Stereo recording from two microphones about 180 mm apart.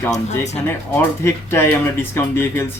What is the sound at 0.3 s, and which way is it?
Speech, 40° left (ahead or behind).